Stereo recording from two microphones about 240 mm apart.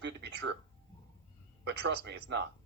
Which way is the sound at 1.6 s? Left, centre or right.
Right.